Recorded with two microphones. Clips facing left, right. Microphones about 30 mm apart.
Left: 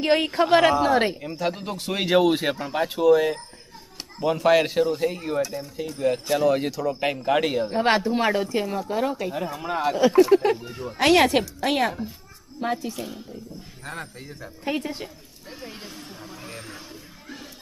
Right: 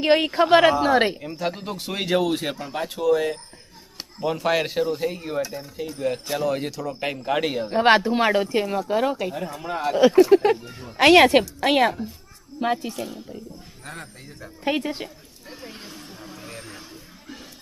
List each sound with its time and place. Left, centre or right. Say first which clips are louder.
0.0 s speech: right 2 dB; centre
1.2 s speech: left 1 dB; centre
7.8 s speech: right 5 dB; centre
9.3 s speech: left 1 dB; centre
10.6 s speech: left 5 dB; centre
10.9 s a child's voice: right 4 dB; centre
13.0 s speech: right 2 dB; centre
14.8 s speech: right 3 dB; centre
15.4 s a sound: left 1 dB; centre